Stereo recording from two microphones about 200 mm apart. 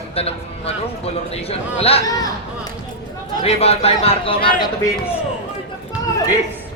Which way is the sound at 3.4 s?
30° left (ahead or behind).